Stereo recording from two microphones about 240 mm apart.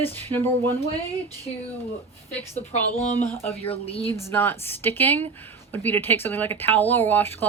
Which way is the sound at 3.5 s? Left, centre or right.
Left.